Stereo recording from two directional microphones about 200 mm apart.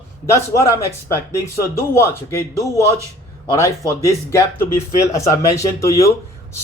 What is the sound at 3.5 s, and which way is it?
Speech, 15° left (ahead or behind).